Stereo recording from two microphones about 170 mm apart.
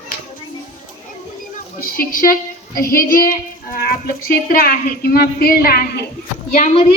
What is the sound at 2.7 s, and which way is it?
Child singing, 55° left (ahead or behind).